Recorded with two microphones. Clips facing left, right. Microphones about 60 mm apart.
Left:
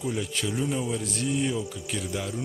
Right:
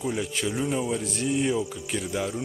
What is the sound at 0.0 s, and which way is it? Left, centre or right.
Speech, centre.